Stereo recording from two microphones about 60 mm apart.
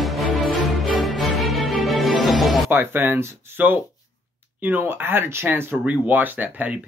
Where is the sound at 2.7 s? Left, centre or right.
Right.